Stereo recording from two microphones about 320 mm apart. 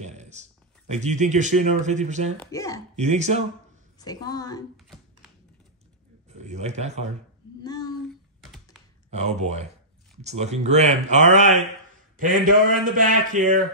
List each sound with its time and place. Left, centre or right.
0.0 s a man's voice: right
2.5 s a woman's voice: centre
3.0 s speech: right
4.0 s a woman's voice: centre
4.8 s a sound: centre
6.3 s speech: right
7.6 s child singing: centre
9.1 s speech: right